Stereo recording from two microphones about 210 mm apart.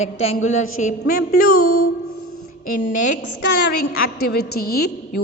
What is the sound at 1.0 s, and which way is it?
Speech, 50° left (ahead or behind).